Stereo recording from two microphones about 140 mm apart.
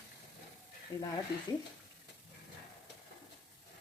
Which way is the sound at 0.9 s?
20° left (ahead or behind).